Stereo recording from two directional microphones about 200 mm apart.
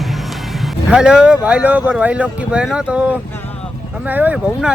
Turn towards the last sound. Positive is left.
turn(degrees=-5)  # may be behind; listen again after turning